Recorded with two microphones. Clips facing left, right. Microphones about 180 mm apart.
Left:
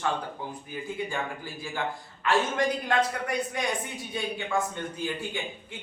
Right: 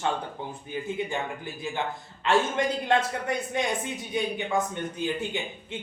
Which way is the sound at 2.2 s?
25° right (ahead or behind).